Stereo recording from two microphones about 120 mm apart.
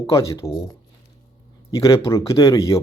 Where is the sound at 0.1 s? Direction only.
25° left (ahead or behind).